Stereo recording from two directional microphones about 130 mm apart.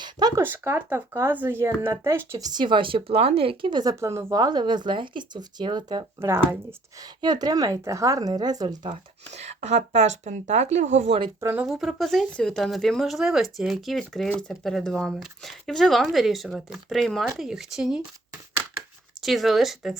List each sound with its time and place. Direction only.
0.0 s a sound: 30° right (ahead or behind)
0.4 s speech: 20° right (ahead or behind)
2.5 s speech: 35° right (ahead or behind)
6.1 s speech: 20° right (ahead or behind)
7.0 s speech: 30° right (ahead or behind)
9.3 s a woman's voice: 60° right (ahead or behind)
11.3 s speech: 20° right (ahead or behind)
11.6 s speech: 5° right (ahead or behind)
19.2 s speech: centre (ahead or behind)